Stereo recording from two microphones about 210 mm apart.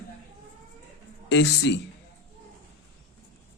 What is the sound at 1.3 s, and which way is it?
Speech, 55° left (ahead or behind).